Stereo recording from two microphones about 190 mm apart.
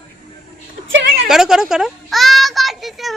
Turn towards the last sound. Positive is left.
turn(degrees=0)  # may be behind; listen again after turning